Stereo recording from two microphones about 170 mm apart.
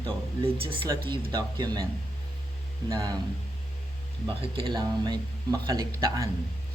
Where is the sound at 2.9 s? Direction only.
20° right (ahead or behind).